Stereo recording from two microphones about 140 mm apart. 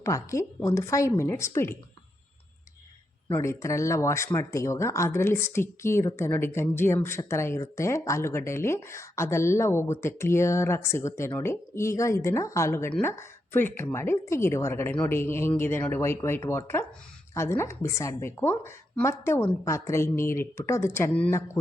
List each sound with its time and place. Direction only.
0.0 s speech: 20° left (ahead or behind)
3.4 s speech: 20° left (ahead or behind)